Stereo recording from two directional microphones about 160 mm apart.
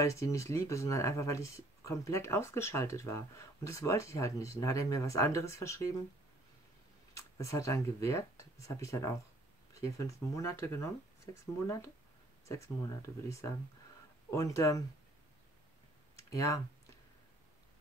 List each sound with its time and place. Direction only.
0.0 s speech: 20° left (ahead or behind)
7.3 s speech: 20° left (ahead or behind)
16.2 s speech: 20° left (ahead or behind)